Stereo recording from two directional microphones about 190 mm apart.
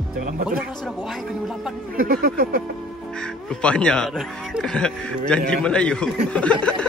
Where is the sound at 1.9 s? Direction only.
50° right (ahead or behind).